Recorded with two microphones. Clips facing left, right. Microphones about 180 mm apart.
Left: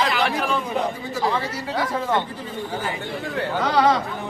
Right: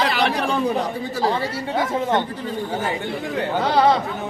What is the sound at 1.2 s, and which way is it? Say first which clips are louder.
A man's voice: right 2 dB; 30° right (ahead or behind).